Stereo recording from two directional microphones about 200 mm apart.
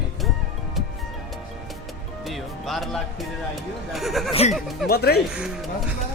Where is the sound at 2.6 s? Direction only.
Centre (ahead or behind).